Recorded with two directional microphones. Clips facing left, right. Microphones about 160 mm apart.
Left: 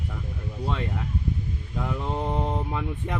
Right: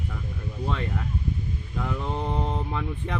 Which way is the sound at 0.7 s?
15° left (ahead or behind).